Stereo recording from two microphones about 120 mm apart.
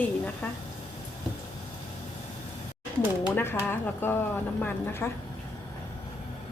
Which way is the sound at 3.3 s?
20° left (ahead or behind).